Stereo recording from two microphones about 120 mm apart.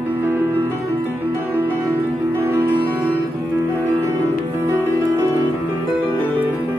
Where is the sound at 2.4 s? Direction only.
15° right (ahead or behind).